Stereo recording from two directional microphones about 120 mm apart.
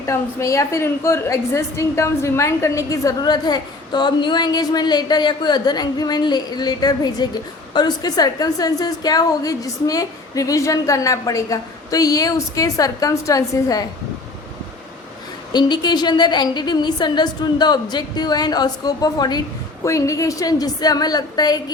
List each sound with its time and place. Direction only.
0.0 s a woman's voice: 25° left (ahead or behind)
15.5 s a woman's voice: 35° left (ahead or behind)